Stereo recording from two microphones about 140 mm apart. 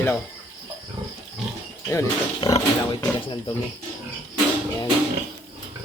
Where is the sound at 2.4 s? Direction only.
40° left (ahead or behind).